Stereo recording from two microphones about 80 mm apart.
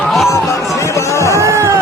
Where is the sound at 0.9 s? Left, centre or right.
Left.